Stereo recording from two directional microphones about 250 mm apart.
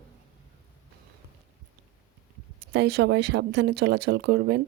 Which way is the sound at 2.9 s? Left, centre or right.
Right.